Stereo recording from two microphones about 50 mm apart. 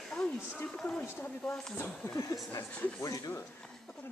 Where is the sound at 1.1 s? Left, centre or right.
Left.